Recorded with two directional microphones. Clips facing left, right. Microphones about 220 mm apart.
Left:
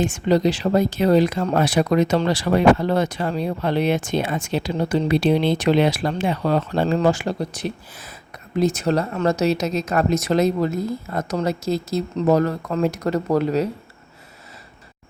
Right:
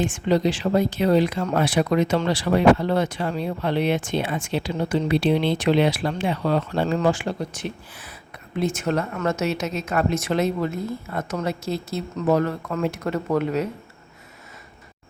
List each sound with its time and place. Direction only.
0.0 s speech: 40° left (ahead or behind)